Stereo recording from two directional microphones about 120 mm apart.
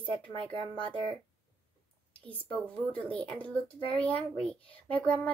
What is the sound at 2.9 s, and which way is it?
Speech, 10° left (ahead or behind).